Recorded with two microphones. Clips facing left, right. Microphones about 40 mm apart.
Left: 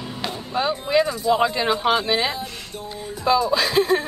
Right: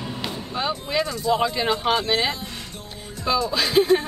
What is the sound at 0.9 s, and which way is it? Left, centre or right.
Speech, centre.